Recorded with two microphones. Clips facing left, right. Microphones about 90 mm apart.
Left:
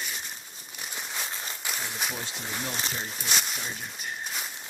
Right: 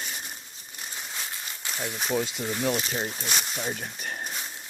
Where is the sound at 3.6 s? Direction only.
50° right (ahead or behind).